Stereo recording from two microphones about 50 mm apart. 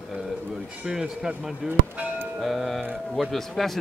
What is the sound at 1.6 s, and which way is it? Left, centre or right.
Speech, right.